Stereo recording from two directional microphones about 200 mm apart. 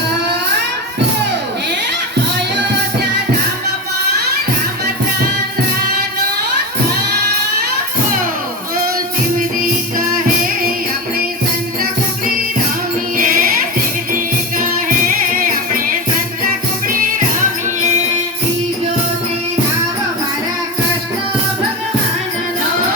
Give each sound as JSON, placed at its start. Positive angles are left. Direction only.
{"t": 13.1, "sound": "music", "side_deg": -45}